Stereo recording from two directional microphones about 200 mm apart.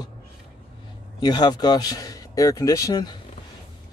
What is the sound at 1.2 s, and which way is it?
Speech, 20° left (ahead or behind).